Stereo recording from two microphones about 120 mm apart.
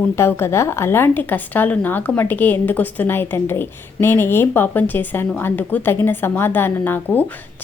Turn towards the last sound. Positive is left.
turn(degrees=15)  # may be behind; listen again after turning